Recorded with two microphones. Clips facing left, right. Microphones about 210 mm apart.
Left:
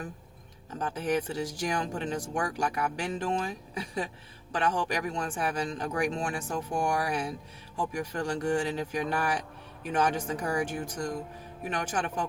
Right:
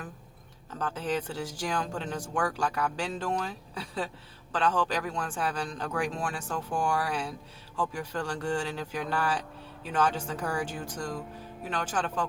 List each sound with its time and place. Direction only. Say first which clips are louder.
0.7 s speech: left 2 dB; 15° left (ahead or behind)